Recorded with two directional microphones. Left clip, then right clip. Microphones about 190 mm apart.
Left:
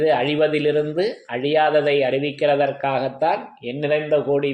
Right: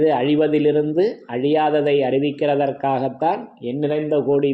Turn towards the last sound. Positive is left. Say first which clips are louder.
# right 1 dB
turn(degrees=-35)  # may be behind; listen again after turning